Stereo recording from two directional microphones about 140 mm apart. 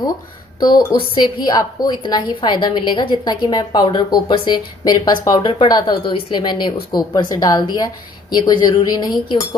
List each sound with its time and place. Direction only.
0.6 s a woman's voice: 30° left (ahead or behind)